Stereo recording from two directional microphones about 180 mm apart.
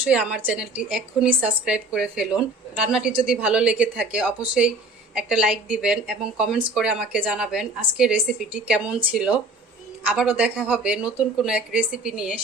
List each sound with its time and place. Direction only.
0.0 s a woman's voice: 5° right (ahead or behind)